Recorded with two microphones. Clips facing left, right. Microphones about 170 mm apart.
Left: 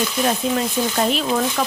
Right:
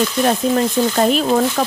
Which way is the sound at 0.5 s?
45° right (ahead or behind).